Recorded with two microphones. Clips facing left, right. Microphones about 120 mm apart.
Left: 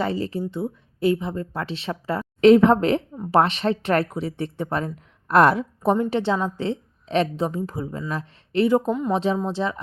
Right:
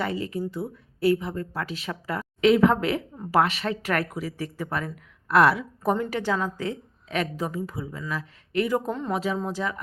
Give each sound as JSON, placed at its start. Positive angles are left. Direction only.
{"t": 0.0, "sound": "speech", "side_deg": 30}
{"t": 5.8, "sound": "speech", "side_deg": 25}
{"t": 7.8, "sound": "speech", "side_deg": 40}
{"t": 8.1, "sound": "speech", "side_deg": 30}
{"t": 8.9, "sound": "speech", "side_deg": 10}
{"t": 9.1, "sound": "speech", "side_deg": 30}